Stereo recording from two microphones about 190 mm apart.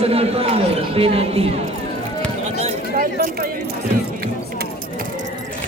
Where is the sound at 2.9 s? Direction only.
55° right (ahead or behind).